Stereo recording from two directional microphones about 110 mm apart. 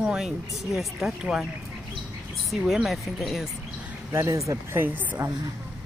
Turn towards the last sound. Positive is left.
turn(degrees=-20)  # may be behind; listen again after turning